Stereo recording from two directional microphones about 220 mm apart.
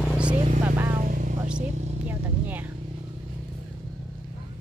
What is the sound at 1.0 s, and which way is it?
Vehicle, 40° right (ahead or behind).